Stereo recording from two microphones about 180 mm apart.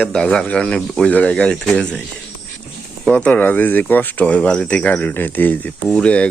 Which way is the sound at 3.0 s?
5° left (ahead or behind).